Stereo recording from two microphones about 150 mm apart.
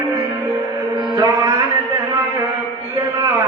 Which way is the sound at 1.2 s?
15° right (ahead or behind).